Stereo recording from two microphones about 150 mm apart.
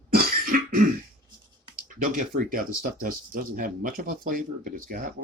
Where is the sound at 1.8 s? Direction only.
60° right (ahead or behind).